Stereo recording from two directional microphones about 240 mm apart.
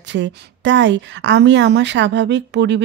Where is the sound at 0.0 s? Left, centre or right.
Right.